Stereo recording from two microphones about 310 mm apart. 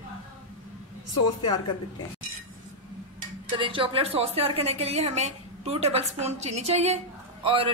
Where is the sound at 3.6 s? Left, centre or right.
Centre.